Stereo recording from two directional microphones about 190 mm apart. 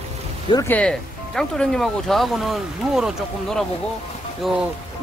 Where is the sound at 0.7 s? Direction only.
5° left (ahead or behind).